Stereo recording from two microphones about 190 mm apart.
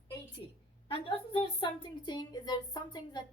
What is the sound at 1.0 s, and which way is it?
A woman's voice, 30° left (ahead or behind).